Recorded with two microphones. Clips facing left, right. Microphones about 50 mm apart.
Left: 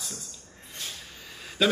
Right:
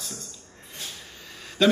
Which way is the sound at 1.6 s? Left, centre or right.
Centre.